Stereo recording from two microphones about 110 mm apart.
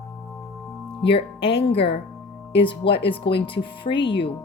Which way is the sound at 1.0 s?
55° left (ahead or behind).